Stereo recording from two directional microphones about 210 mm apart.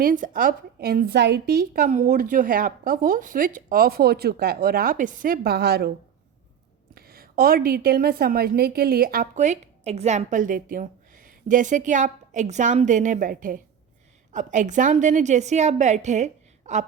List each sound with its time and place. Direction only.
0.0 s a woman's voice: 40° right (ahead or behind)
6.9 s a woman's voice: 45° right (ahead or behind)